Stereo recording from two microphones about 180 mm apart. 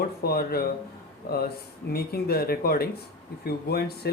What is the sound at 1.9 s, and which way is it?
Speech, 60° left (ahead or behind).